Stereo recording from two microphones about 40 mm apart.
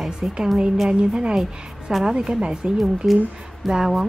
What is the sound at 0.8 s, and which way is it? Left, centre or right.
A woman's voice, right.